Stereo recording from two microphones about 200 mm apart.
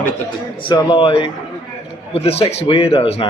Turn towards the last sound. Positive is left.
turn(degrees=30)  # may be behind; listen again after turning